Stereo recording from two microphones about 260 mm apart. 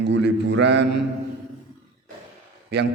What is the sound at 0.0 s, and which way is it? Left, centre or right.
A man's voice, right.